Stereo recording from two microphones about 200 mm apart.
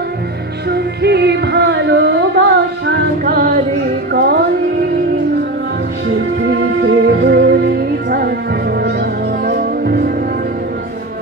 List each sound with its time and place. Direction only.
0.7 s music: 55° right (ahead or behind)
6.4 s music: 65° right (ahead or behind); by 10.1 s 50° right (ahead or behind)